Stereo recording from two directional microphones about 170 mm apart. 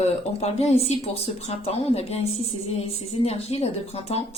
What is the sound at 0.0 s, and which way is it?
Speech, 40° left (ahead or behind).